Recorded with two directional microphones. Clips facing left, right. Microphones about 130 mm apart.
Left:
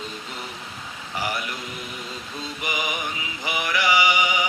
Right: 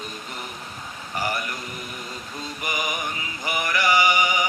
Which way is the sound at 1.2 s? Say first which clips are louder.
Right 1 dB; 15° left (ahead or behind).